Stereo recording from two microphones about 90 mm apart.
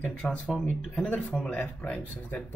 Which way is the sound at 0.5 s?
5° left (ahead or behind).